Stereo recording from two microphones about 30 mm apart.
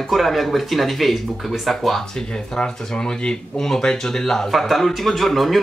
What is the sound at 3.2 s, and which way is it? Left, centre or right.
Speech, left.